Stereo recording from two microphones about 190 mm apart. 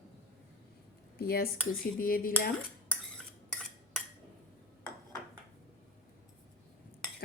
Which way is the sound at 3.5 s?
5° left (ahead or behind).